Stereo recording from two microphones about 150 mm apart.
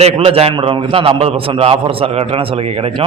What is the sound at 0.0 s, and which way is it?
A man's voice, 40° right (ahead or behind).